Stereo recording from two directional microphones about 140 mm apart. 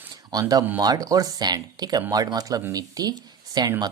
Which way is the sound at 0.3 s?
25° right (ahead or behind).